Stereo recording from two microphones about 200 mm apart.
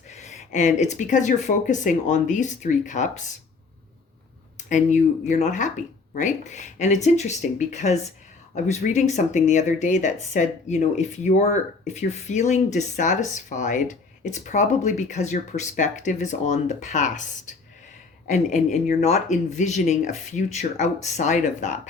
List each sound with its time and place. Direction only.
0.1 s speech: 35° left (ahead or behind)
4.5 s speech: 35° left (ahead or behind)